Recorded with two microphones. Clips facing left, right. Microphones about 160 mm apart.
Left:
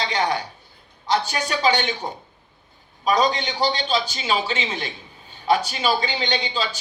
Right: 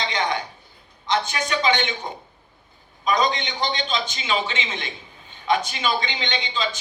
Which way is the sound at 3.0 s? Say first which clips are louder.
Left 2 dB; 35° left (ahead or behind).